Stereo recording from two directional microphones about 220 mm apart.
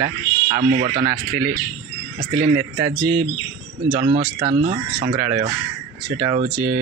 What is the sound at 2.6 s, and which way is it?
Speech, 10° right (ahead or behind).